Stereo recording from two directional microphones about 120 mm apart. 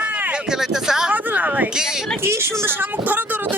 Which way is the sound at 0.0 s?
10° right (ahead or behind).